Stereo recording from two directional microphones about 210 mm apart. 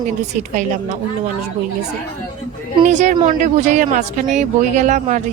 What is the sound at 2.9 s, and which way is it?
Speech, 35° right (ahead or behind).